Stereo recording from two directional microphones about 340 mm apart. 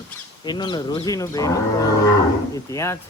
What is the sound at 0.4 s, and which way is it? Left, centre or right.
A man's voice, centre.